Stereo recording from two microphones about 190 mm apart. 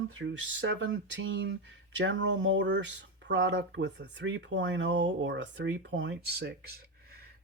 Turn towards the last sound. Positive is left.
turn(degrees=-60)  # may be behind; listen again after turning